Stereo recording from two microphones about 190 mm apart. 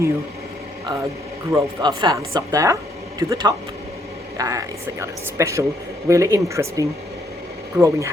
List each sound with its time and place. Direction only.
1.5 s speech: 20° right (ahead or behind)